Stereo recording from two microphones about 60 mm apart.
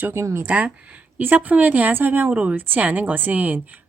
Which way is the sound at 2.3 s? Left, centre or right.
Right.